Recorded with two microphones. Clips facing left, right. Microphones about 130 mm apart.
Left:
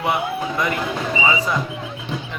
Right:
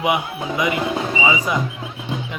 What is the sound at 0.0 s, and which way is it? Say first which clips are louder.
Speech: even; 10° right (ahead or behind).